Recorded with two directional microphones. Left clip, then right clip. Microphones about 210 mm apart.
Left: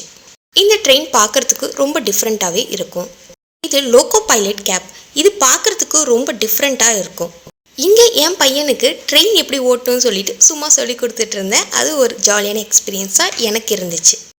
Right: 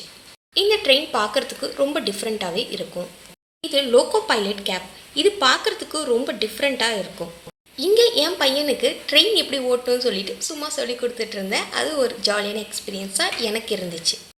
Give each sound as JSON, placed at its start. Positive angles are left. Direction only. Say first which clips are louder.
{"t": 0.5, "sound": "a woman's voice", "louder": "left 7 dB", "side_deg": 50}